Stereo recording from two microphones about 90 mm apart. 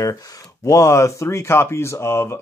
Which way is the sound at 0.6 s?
35° left (ahead or behind).